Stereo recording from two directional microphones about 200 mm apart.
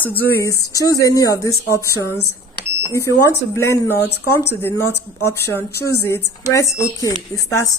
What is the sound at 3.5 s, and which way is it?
Speech, 15° left (ahead or behind).